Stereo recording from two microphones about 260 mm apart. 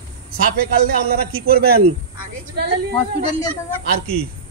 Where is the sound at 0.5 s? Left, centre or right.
Right.